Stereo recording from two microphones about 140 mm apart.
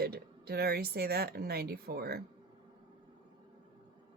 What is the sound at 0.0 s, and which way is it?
Speech, 90° right.